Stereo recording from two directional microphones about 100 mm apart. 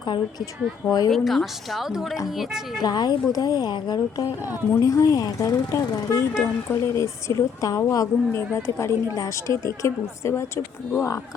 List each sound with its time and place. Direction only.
0.0 s a woman's voice: 50° left (ahead or behind)
0.9 s speech: 35° left (ahead or behind)
1.1 s a woman's voice: centre (ahead or behind)
2.8 s a woman's voice: 45° left (ahead or behind)
4.7 s speech: 35° left (ahead or behind)